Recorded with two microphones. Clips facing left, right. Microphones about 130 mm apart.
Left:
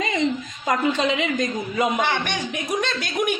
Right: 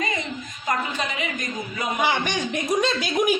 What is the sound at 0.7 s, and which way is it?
Speech, 90° left.